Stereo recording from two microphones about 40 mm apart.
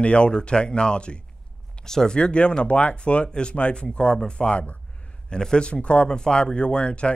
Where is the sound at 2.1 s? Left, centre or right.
Left.